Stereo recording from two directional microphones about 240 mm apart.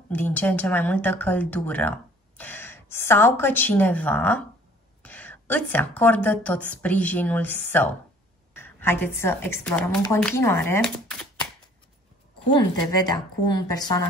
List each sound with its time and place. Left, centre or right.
0.1 s a woman's voice: centre
13.0 s speech: centre